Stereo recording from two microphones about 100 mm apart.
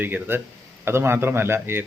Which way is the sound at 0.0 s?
20° right (ahead or behind).